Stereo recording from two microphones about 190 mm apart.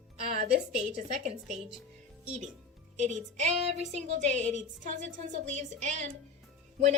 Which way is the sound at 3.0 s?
40° right (ahead or behind).